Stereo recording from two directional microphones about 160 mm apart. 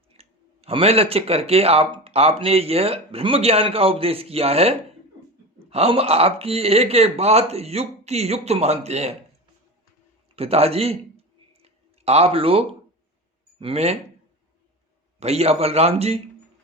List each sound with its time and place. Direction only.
0.1 s speech: 40° right (ahead or behind)
10.3 s speech: 40° right (ahead or behind)
11.6 s a sound: 40° right (ahead or behind)
13.6 s speech: 40° right (ahead or behind)
15.2 s speech: 40° right (ahead or behind)